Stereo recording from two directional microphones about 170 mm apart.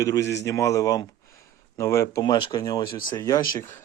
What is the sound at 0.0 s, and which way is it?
Speech, 20° left (ahead or behind).